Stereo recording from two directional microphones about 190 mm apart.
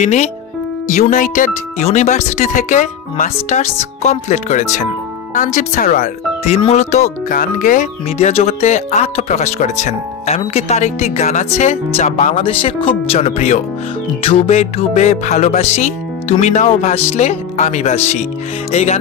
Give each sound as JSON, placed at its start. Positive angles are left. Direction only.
{"t": 0.0, "sound": "speech", "side_deg": 40}